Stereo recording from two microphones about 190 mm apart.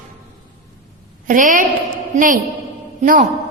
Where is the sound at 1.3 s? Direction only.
45° right (ahead or behind).